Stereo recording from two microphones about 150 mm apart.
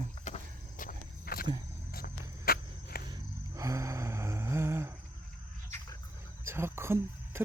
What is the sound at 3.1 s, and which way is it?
Music, 20° right (ahead or behind).